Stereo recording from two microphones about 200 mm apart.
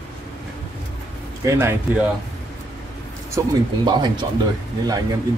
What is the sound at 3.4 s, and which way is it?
Speech, 15° right (ahead or behind).